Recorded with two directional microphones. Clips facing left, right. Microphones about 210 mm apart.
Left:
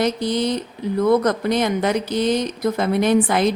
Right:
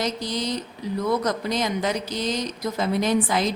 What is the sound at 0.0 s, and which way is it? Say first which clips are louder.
Speech: left 7 dB; 60° left (ahead or behind).